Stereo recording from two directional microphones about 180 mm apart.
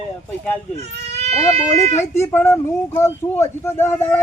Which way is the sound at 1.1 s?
40° right (ahead or behind).